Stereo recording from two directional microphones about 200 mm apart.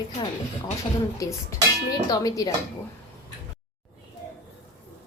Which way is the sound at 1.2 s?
15° left (ahead or behind).